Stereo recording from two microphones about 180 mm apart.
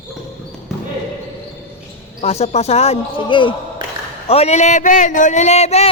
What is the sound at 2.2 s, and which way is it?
A man's voice, 35° left (ahead or behind).